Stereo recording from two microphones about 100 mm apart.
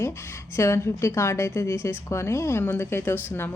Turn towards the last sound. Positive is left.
turn(degrees=25)  # may be behind; listen again after turning